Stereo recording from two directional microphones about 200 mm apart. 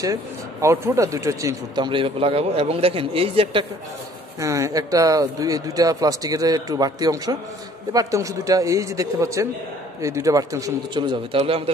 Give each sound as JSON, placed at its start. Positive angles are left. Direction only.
{"t": 0.0, "sound": "speech", "side_deg": -15}
{"t": 4.4, "sound": "speech", "side_deg": -15}